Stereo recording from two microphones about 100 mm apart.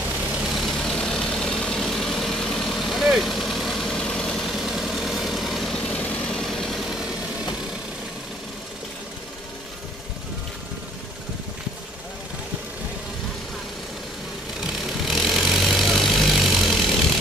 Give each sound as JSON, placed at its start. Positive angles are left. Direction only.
{"t": 0.6, "sound": "vehicle", "side_deg": 0}
{"t": 5.8, "sound": "vehicle", "side_deg": 15}
{"t": 15.0, "sound": "vehicle", "side_deg": 0}